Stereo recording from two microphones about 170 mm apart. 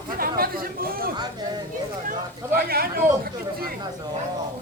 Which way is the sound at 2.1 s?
60° right (ahead or behind).